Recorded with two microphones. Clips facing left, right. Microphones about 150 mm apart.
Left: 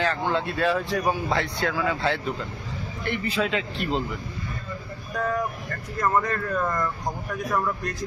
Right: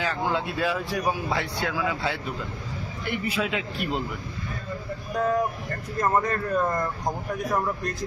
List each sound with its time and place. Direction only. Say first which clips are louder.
0.0 s speech: left 2 dB; 10° right (ahead or behind)
5.1 s speech: right 2 dB; 20° right (ahead or behind)